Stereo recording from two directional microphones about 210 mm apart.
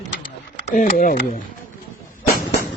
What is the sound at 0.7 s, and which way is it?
Speech, 40° left (ahead or behind).